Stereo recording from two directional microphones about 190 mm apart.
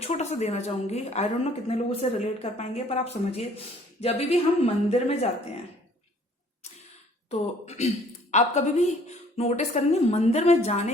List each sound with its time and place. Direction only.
0.0 s a woman's voice: 35° left (ahead or behind)
7.3 s a woman's voice: 35° left (ahead or behind)